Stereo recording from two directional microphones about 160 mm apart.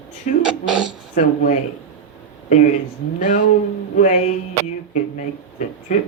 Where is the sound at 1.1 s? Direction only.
50° left (ahead or behind).